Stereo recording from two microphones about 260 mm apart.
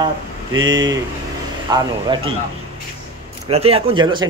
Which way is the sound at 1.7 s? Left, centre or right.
Centre.